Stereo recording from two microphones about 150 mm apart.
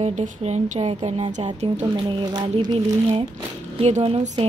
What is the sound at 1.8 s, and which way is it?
Speech, 35° right (ahead or behind).